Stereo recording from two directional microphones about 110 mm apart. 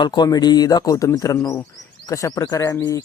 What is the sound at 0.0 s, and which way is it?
Speech, 40° left (ahead or behind).